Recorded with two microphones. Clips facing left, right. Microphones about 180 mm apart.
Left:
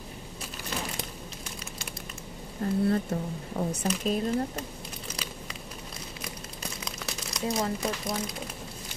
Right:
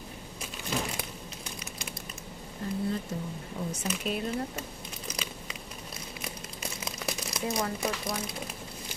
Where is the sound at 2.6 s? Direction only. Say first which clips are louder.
Left 6 dB; 50° left (ahead or behind).